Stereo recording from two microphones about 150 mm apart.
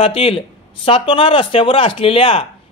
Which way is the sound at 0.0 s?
40° left (ahead or behind).